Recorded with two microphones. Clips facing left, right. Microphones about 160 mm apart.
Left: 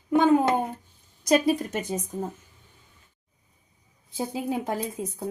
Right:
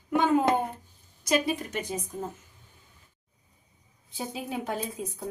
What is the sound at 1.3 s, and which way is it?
Speech, 40° left (ahead or behind).